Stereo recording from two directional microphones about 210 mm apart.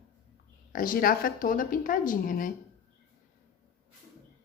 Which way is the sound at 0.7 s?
40° left (ahead or behind).